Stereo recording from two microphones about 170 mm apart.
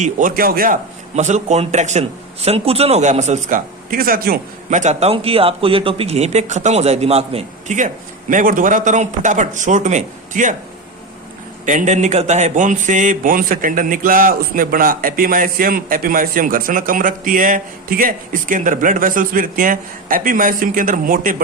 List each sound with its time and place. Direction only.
0.0 s a man's voice: 50° right (ahead or behind)
11.6 s speech: 45° right (ahead or behind)